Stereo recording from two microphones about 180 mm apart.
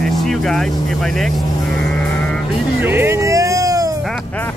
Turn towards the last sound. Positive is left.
turn(degrees=-20)  # may be behind; listen again after turning